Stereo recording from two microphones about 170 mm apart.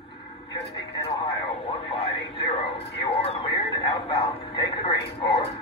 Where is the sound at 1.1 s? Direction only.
35° left (ahead or behind).